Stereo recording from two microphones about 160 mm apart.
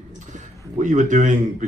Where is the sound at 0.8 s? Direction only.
50° right (ahead or behind).